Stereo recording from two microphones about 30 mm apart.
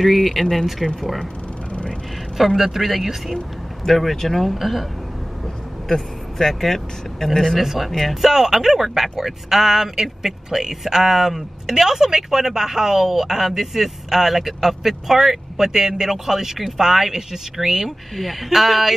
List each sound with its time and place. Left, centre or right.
0.0 s speech: centre
2.3 s speech: centre
5.9 s speech: centre
7.6 s speech: centre